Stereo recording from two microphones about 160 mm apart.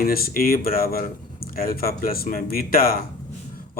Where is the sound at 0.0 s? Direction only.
65° left (ahead or behind).